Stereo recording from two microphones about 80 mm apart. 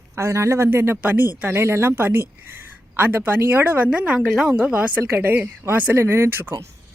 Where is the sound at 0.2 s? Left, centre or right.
Right.